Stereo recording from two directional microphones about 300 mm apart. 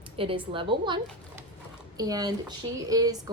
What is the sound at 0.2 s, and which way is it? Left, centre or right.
Speech, centre.